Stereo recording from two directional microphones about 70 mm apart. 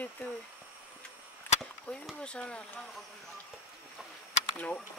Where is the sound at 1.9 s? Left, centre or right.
Left.